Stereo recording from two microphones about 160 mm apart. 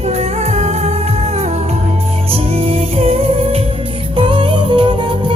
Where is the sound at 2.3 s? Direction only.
40° right (ahead or behind).